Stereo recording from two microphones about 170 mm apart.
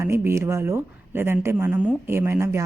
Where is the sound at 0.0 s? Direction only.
15° right (ahead or behind).